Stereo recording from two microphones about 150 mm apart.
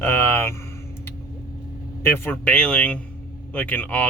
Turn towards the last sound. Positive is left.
turn(degrees=10)  # may be behind; listen again after turning